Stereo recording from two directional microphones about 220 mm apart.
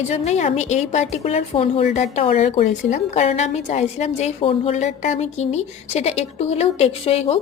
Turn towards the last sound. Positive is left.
turn(degrees=25)  # may be behind; listen again after turning